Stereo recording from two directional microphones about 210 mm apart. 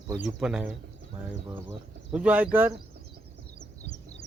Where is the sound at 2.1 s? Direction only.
5° right (ahead or behind).